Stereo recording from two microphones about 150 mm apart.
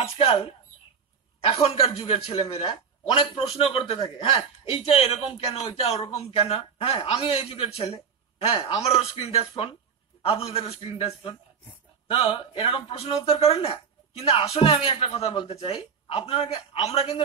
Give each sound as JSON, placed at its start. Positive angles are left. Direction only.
{"t": 0.0, "sound": "a man's voice", "side_deg": 40}
{"t": 8.5, "sound": "a man's voice", "side_deg": 30}
{"t": 8.8, "sound": "a man's voice", "side_deg": 40}